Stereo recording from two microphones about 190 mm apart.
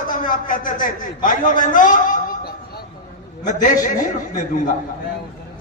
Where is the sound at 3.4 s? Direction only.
40° left (ahead or behind).